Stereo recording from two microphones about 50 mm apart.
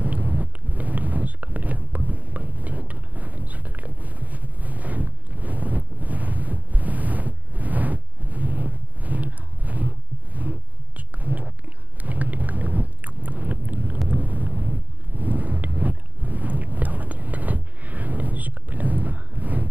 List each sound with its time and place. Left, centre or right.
0.0 s a sound: right
12.0 s boat: right
14.0 s wind noise: right